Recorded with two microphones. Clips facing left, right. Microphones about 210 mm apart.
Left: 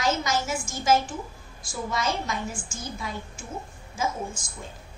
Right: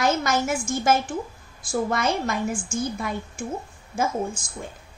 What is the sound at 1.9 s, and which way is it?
A woman's voice, 60° right (ahead or behind).